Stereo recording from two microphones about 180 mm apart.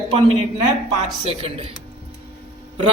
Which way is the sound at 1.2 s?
35° right (ahead or behind).